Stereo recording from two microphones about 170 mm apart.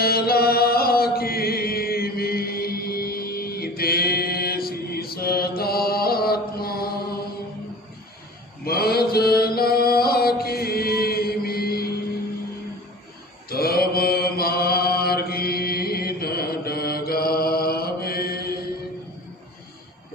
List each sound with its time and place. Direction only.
0.0 s chant: 65° left (ahead or behind)
8.6 s mantra: 65° left (ahead or behind)
13.5 s mantra: 65° left (ahead or behind)